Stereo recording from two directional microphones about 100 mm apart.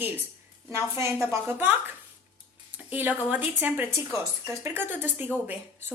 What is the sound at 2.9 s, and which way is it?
A woman's voice, 15° right (ahead or behind).